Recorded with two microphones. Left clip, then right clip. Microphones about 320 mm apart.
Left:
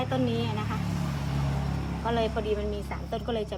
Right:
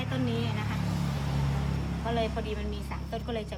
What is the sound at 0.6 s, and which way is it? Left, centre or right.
Vehicle, centre.